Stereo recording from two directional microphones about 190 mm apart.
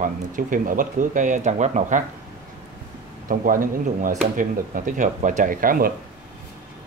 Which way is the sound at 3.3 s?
45° right (ahead or behind).